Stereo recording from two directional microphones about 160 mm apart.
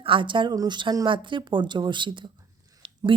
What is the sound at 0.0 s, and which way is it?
A woman's voice, 30° right (ahead or behind).